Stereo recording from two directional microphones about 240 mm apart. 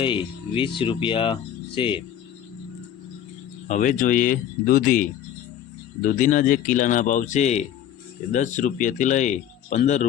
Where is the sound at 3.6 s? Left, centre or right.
Left.